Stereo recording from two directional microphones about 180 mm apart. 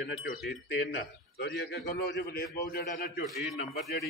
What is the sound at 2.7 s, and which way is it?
Speech, 50° left (ahead or behind).